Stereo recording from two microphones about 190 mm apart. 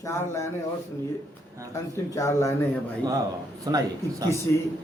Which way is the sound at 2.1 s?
15° left (ahead or behind).